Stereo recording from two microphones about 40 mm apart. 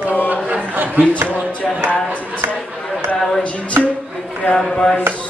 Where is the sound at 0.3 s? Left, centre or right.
Right.